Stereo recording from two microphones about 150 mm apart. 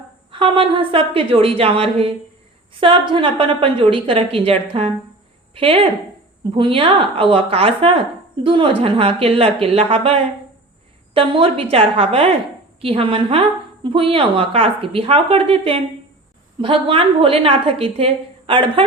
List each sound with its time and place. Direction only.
0.3 s a woman's voice: 35° right (ahead or behind)